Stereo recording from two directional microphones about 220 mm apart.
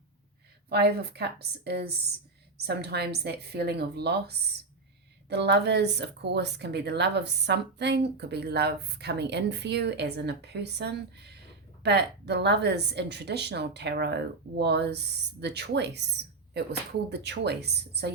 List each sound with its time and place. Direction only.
0.7 s speech: 45° right (ahead or behind)